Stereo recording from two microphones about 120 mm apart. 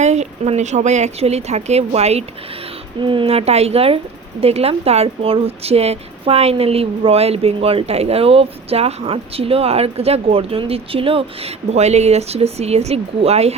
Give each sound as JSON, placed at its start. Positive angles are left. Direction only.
{"t": 0.0, "sound": "speech", "side_deg": -70}
{"t": 3.0, "sound": "speech", "side_deg": -45}